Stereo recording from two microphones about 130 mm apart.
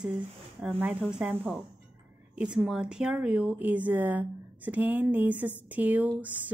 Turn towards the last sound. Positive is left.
turn(degrees=-10)  # may be behind; listen again after turning